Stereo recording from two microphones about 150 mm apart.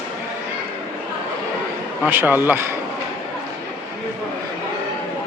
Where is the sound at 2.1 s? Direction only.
15° right (ahead or behind).